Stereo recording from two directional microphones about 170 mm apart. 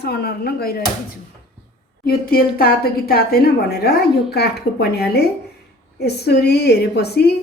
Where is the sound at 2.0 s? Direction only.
60° left (ahead or behind).